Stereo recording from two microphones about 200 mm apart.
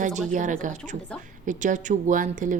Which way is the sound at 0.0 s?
40° right (ahead or behind).